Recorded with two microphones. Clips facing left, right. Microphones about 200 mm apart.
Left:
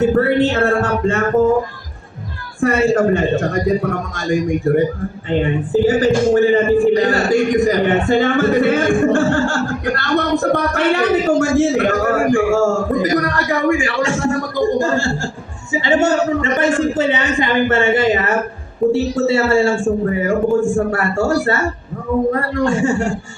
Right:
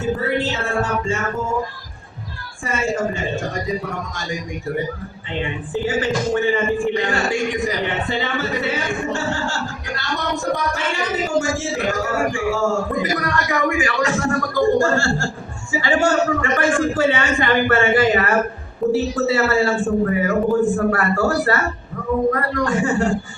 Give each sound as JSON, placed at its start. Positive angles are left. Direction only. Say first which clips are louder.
{"t": 0.2, "sound": "a man's voice", "louder": "left 8 dB", "side_deg": 60}
{"t": 2.6, "sound": "a man's voice", "louder": "left 8 dB", "side_deg": 60}